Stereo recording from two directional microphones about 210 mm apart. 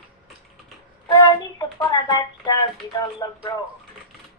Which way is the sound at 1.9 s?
20° left (ahead or behind).